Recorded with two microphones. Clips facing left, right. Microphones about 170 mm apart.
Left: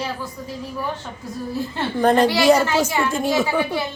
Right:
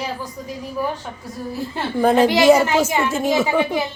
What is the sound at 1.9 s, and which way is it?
A child's voice, 5° right (ahead or behind).